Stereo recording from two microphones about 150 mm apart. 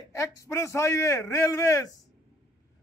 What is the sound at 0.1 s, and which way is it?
A man's voice, 20° left (ahead or behind).